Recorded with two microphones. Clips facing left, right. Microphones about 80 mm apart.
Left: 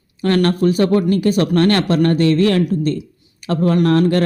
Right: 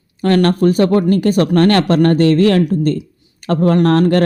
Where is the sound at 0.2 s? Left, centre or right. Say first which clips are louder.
Right 3 dB; right.